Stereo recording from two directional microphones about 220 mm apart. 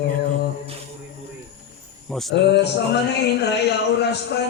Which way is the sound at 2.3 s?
50° left (ahead or behind).